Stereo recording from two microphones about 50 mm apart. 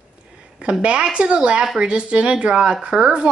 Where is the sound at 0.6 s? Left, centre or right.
Right.